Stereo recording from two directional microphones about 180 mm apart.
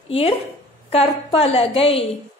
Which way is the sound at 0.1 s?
30° left (ahead or behind).